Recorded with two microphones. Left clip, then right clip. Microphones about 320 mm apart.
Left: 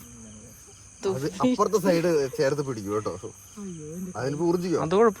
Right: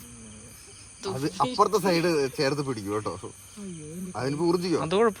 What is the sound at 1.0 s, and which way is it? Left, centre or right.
Speech, left.